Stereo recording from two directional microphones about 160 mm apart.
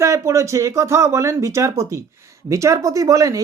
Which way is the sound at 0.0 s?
20° right (ahead or behind).